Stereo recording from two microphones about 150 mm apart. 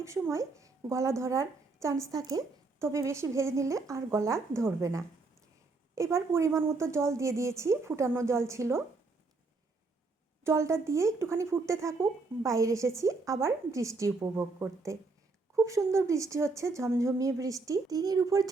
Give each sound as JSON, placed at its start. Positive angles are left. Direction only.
{"t": 0.0, "sound": "speech", "side_deg": -20}
{"t": 10.4, "sound": "speech", "side_deg": -20}